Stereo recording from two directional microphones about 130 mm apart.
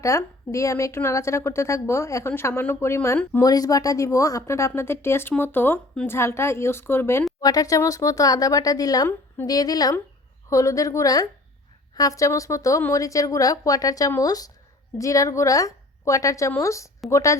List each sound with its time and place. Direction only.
0.0 s a woman's voice: 25° left (ahead or behind)